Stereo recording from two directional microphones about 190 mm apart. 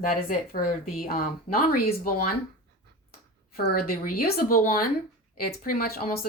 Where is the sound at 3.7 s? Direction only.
50° left (ahead or behind).